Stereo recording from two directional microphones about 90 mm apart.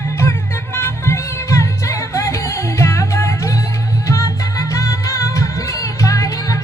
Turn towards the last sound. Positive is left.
turn(degrees=40)  # may be behind; listen again after turning